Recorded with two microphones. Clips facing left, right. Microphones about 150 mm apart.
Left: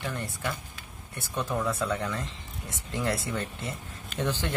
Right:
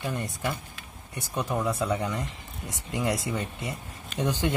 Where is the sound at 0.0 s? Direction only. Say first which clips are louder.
Right 2 dB; 15° right (ahead or behind).